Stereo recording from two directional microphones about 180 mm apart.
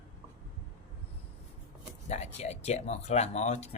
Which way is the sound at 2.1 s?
35° left (ahead or behind).